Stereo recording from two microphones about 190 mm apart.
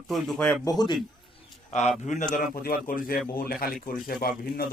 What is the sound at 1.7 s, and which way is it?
A man's voice, 40° left (ahead or behind).